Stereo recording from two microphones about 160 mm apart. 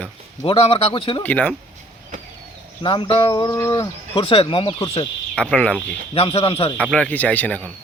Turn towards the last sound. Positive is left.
turn(degrees=10)  # may be behind; listen again after turning